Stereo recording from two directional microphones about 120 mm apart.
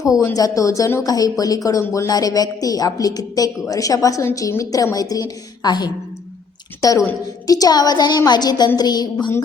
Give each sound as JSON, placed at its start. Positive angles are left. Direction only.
{"t": 0.3, "sound": "speech", "side_deg": 30}